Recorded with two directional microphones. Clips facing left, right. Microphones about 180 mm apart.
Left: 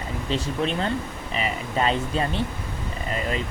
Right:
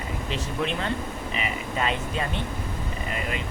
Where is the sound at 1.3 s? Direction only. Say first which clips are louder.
Left 5 dB; 35° left (ahead or behind).